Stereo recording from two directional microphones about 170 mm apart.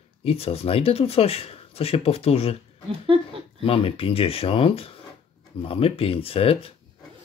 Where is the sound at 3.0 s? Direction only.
30° right (ahead or behind).